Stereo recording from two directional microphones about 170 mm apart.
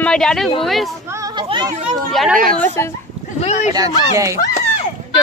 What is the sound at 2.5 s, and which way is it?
Speech, 15° left (ahead or behind).